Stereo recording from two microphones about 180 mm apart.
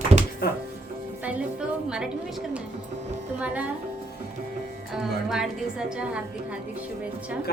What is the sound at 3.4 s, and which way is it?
Speech, 10° right (ahead or behind).